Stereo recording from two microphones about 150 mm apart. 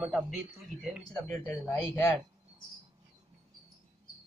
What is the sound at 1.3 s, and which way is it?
Speech, 10° left (ahead or behind).